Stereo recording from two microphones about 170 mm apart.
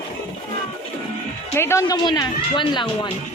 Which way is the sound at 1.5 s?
15° left (ahead or behind).